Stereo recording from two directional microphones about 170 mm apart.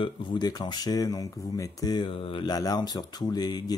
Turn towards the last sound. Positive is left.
turn(degrees=25)  # may be behind; listen again after turning